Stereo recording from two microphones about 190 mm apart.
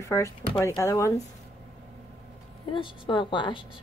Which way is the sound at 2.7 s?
25° left (ahead or behind).